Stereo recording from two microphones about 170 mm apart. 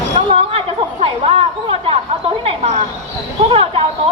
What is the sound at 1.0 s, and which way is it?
A woman's voice, 35° right (ahead or behind).